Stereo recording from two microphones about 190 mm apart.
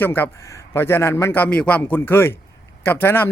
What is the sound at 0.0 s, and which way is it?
A man's voice, 10° left (ahead or behind).